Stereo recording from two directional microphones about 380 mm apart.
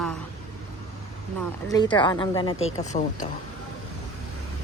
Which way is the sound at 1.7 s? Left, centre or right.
Centre.